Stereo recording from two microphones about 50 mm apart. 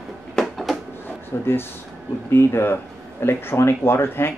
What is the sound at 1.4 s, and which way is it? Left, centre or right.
Speech, left.